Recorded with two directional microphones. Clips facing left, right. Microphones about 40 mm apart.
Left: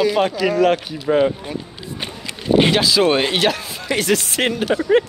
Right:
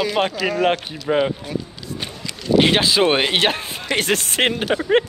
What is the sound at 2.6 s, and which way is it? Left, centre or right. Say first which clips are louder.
Speech: left 1 dB; right.